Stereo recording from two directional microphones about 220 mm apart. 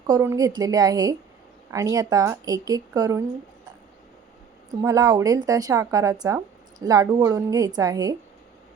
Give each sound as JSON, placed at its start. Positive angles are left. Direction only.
{"t": 0.1, "sound": "speech", "side_deg": -15}
{"t": 4.7, "sound": "speech", "side_deg": -15}